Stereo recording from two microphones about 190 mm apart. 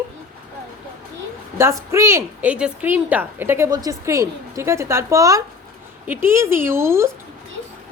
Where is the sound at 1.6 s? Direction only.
15° right (ahead or behind).